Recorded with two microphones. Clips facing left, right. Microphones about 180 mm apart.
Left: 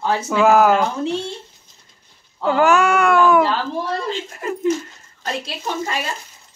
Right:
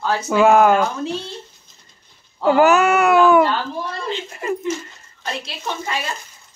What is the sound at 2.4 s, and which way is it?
Speech, 5° right (ahead or behind).